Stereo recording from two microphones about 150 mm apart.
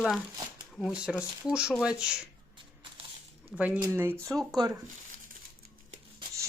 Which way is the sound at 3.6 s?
10° right (ahead or behind).